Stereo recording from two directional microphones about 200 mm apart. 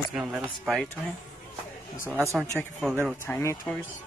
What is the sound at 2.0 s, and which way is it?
Speech, 10° right (ahead or behind).